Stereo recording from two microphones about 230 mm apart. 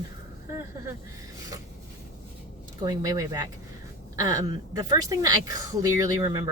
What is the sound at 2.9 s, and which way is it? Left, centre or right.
A woman's voice, centre.